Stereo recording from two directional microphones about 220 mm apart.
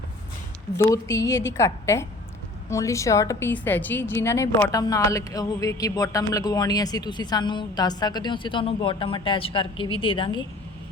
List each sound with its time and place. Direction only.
0.9 s a woman's voice: 15° left (ahead or behind)